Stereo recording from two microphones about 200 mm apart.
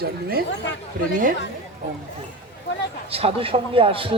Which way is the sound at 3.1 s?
30° right (ahead or behind).